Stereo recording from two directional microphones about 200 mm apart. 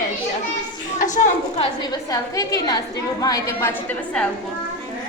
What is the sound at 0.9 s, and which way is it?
A woman's voice, 40° left (ahead or behind).